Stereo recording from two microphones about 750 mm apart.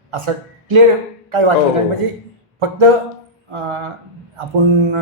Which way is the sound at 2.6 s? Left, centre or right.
Right.